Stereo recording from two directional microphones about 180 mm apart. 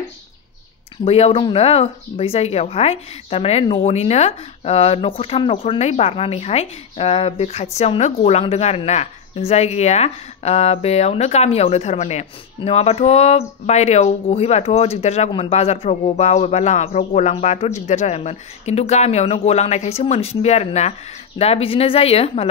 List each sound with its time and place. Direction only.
1.0 s speech: 35° left (ahead or behind)